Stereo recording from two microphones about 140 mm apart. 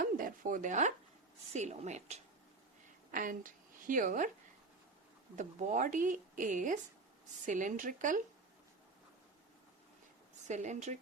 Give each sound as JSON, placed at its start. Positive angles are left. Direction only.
{"t": 0.0, "sound": "a woman's voice", "side_deg": -80}
{"t": 3.1, "sound": "a woman's voice", "side_deg": -75}
{"t": 5.4, "sound": "speech", "side_deg": -65}
{"t": 10.4, "sound": "speech", "side_deg": -55}